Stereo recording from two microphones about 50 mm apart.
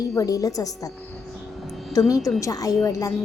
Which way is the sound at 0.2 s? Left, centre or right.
Left.